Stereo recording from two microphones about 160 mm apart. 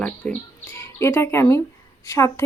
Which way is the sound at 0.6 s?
15° left (ahead or behind).